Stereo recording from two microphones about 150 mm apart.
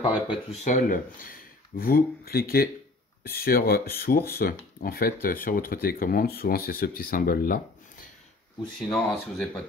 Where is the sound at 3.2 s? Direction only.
80° left.